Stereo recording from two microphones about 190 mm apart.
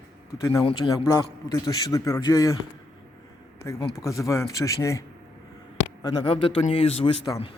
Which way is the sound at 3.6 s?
15° left (ahead or behind).